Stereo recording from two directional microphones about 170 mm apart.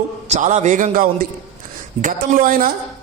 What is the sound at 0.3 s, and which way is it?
A man's voice, 45° right (ahead or behind).